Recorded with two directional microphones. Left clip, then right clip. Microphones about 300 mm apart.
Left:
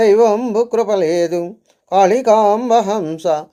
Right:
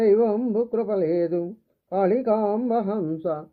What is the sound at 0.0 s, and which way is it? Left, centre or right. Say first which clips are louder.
Speech: left 8 dB; centre.